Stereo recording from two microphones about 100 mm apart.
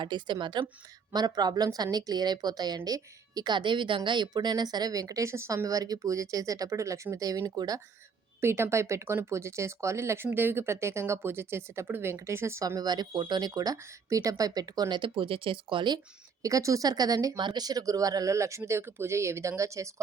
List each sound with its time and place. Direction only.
0.0 s a woman's voice: 50° right (ahead or behind)
8.4 s a woman's voice: 25° right (ahead or behind); by 16.0 s 55° right (ahead or behind)
16.4 s a woman's voice: 35° right (ahead or behind)